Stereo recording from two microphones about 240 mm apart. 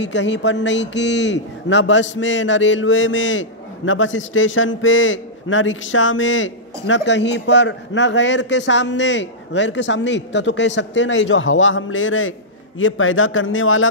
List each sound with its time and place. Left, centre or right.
0.0 s a man's voice: left